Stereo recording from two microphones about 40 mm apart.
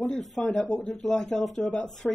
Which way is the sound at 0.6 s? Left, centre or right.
Left.